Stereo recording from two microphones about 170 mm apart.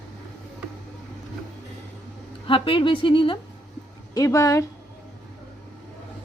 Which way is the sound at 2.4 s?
30° left (ahead or behind).